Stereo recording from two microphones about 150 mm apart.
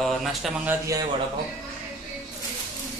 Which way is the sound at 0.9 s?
20° right (ahead or behind).